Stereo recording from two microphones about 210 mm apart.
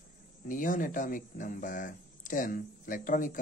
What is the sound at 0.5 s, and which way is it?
Speech, 40° left (ahead or behind).